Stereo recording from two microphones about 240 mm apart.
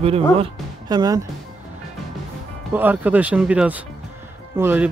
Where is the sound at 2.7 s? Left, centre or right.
Centre.